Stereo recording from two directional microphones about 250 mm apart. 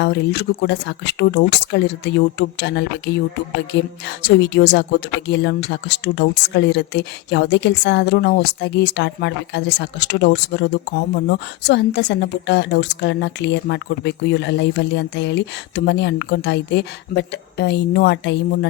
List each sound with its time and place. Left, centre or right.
0.0 s speech: left